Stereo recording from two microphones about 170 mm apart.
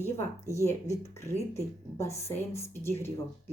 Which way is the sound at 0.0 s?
15° left (ahead or behind).